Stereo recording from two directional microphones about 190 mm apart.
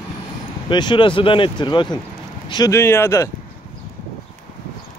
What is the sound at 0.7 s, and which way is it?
Speech, 25° left (ahead or behind).